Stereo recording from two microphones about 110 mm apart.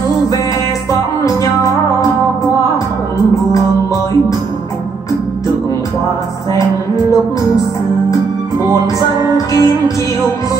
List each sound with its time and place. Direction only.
1.2 s music: 30° left (ahead or behind)
9.5 s music: 30° left (ahead or behind)